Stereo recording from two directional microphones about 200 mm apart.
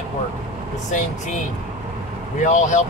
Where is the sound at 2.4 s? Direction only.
35° left (ahead or behind).